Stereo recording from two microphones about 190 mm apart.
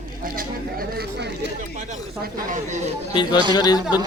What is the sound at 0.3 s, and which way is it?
Speech, 50° right (ahead or behind).